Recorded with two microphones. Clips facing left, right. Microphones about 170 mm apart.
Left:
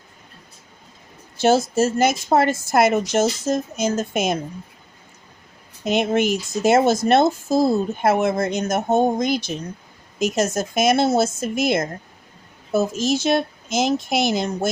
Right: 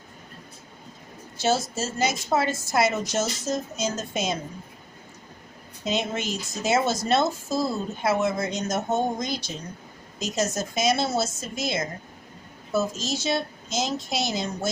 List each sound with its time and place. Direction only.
1.4 s a woman's voice: 55° left (ahead or behind)
5.8 s a woman's voice: 55° left (ahead or behind)